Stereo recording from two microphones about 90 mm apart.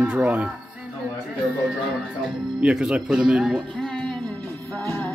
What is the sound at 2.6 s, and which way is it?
Speech, 10° right (ahead or behind).